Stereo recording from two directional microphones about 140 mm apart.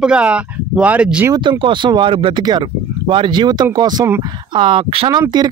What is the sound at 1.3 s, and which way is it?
Speech, 35° right (ahead or behind).